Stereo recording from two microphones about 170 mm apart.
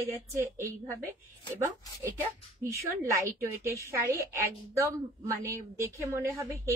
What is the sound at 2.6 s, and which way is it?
A woman's voice, 15° right (ahead or behind).